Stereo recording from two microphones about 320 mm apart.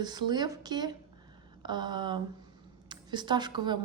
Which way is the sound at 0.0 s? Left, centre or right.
Centre.